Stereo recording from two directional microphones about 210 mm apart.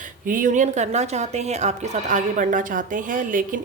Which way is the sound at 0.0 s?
40° right (ahead or behind).